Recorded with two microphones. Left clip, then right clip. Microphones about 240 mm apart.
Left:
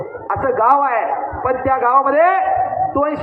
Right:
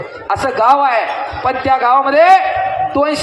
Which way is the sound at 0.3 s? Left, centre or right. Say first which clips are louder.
Right 2 dB; right.